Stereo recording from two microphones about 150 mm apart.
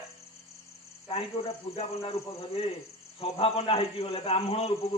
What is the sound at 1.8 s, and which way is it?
A man's voice, 40° left (ahead or behind).